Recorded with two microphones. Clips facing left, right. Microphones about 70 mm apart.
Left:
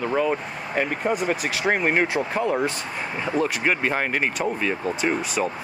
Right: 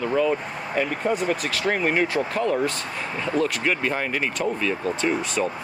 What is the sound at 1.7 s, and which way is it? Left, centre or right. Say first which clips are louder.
Speech: left 1 dB; left.